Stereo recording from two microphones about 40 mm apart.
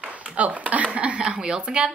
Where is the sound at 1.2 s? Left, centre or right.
Right.